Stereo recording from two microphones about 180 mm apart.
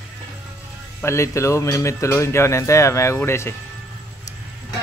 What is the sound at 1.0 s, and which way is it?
Speech, 15° left (ahead or behind).